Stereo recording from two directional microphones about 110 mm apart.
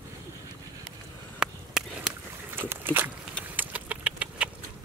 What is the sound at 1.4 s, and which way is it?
Chop, 5° right (ahead or behind).